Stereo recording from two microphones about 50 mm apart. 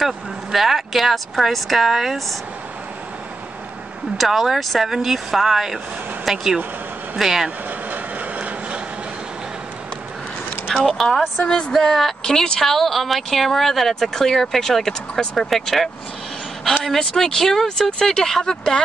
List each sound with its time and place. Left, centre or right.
0.0 s a woman's voice: centre
4.2 s a woman's voice: centre
7.9 s vehicle: right
10.7 s a woman's voice: centre